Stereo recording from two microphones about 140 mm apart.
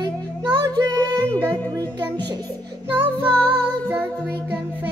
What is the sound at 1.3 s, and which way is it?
Music, 10° left (ahead or behind).